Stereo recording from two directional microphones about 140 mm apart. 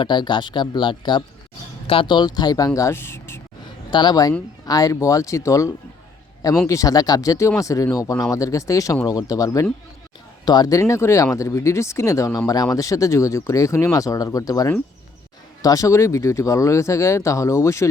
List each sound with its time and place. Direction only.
0.0 s speech: 35° left (ahead or behind); by 3.4 s 20° left (ahead or behind)
3.9 s speech: 30° left (ahead or behind)